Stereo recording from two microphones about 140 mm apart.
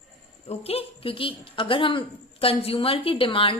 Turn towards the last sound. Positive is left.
turn(degrees=40)  # may be behind; listen again after turning